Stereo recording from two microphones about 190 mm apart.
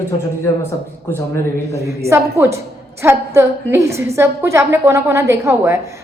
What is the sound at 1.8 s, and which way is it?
A woman's voice, 15° right (ahead or behind).